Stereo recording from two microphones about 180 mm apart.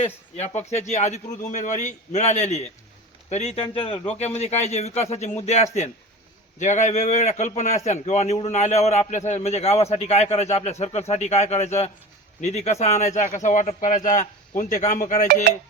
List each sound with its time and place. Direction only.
0.0 s a man's voice: 40° left (ahead or behind)